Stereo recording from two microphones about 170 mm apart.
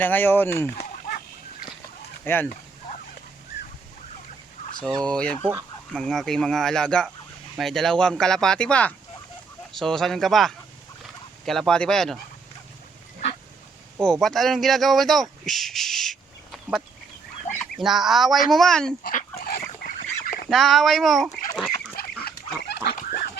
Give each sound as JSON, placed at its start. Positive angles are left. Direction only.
{"t": 0.0, "sound": "speech", "side_deg": 10}
{"t": 2.2, "sound": "speech", "side_deg": 10}
{"t": 5.0, "sound": "speech", "side_deg": 5}
{"t": 14.0, "sound": "speech", "side_deg": 5}
{"t": 17.8, "sound": "speech", "side_deg": 0}
{"t": 19.0, "sound": "dog", "side_deg": 60}
{"t": 20.5, "sound": "speech", "side_deg": 0}
{"t": 21.5, "sound": "goose", "side_deg": 0}
{"t": 21.9, "sound": "goose", "side_deg": 65}